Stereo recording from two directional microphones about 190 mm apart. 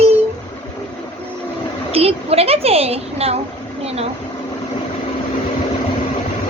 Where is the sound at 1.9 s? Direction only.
30° right (ahead or behind).